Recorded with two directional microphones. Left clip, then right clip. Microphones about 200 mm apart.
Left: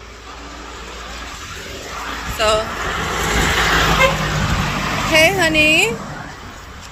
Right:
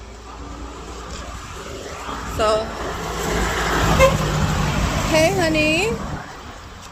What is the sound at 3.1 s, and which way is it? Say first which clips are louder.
Vehicle: left 5 dB; 25° right (ahead or behind).